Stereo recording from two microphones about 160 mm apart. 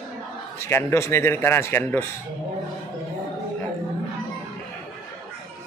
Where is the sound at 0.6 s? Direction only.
15° left (ahead or behind).